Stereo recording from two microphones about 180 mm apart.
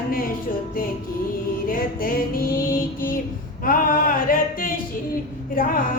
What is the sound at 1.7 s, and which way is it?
Speech, 50° left (ahead or behind).